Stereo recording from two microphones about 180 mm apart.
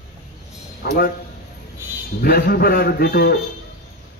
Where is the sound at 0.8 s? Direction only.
55° left (ahead or behind).